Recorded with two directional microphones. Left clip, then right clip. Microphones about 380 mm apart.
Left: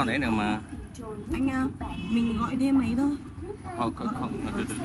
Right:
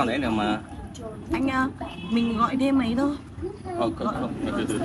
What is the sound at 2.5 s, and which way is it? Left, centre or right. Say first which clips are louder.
Speech: right 2 dB; centre.